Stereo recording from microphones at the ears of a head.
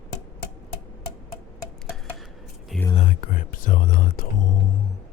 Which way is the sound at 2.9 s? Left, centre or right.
Left.